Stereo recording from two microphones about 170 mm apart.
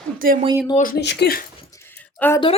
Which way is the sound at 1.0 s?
70° left (ahead or behind).